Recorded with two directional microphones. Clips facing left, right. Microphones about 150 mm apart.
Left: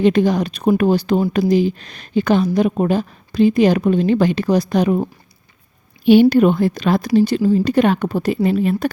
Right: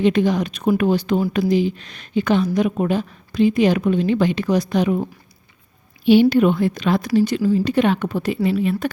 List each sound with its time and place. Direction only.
0.0 s a woman's voice: 35° left (ahead or behind)
6.1 s a woman's voice: 45° left (ahead or behind)